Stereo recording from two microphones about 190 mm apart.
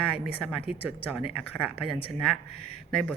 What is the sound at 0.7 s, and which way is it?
Music, 5° right (ahead or behind).